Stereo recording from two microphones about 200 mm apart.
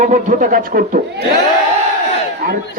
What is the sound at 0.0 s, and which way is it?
A man's voice, 40° right (ahead or behind).